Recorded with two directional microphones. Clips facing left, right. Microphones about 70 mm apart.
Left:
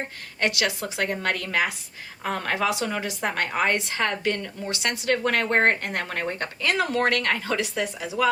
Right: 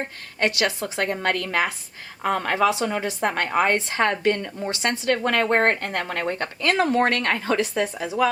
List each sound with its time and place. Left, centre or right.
0.4 s a woman's voice: right